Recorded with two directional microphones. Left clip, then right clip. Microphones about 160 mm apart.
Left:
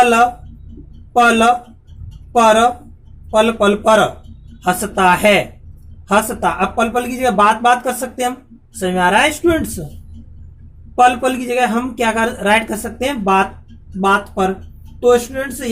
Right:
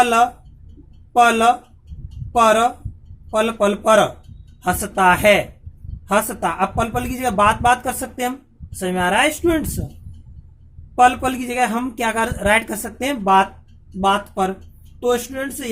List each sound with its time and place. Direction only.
0.0 s speech: 35° right (ahead or behind)
10.9 s speech: 35° right (ahead or behind)
15.0 s speech: 35° right (ahead or behind)